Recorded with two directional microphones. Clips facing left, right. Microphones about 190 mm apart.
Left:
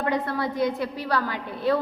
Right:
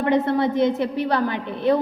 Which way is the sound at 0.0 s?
25° right (ahead or behind).